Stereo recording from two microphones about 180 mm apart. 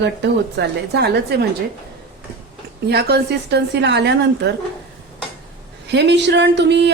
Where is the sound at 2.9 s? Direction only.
65° right (ahead or behind).